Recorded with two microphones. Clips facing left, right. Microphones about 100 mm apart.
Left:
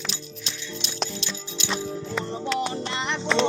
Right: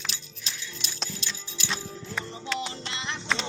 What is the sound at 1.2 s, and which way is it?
Music, 15° left (ahead or behind).